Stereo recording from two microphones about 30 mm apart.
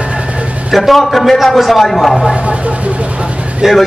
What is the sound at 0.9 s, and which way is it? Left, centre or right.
Speech, centre.